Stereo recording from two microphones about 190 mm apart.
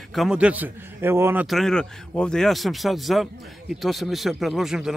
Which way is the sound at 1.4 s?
Centre (ahead or behind).